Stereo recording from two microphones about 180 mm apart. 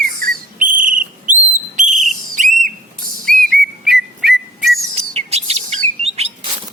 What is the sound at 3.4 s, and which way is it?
Whistle, centre (ahead or behind).